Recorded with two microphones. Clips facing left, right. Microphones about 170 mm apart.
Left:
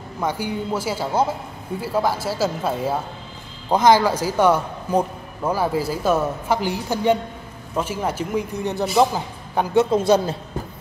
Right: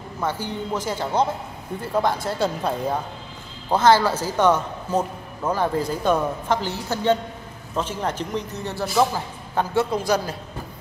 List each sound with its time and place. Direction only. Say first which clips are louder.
0.2 s a man's voice: left 2 dB; 10° left (ahead or behind)